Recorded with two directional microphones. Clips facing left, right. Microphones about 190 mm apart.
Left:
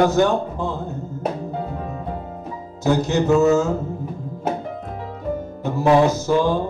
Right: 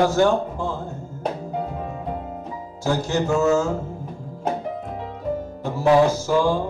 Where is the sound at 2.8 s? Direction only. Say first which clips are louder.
Left 4 dB; 20° left (ahead or behind).